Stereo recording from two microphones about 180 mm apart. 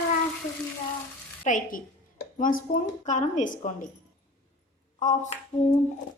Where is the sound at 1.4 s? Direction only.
45° left (ahead or behind).